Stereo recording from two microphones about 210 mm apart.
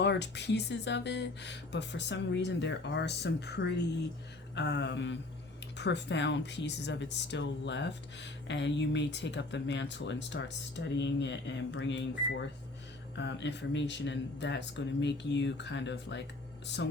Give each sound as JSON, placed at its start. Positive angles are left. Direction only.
{"t": 0.0, "sound": "speech", "side_deg": 55}